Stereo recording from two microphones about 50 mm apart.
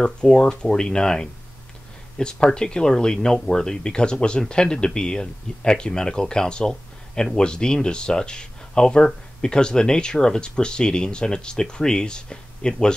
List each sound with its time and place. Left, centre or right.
0.0 s speech: centre